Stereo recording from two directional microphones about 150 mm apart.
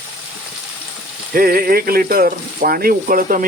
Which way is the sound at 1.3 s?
75° right (ahead or behind).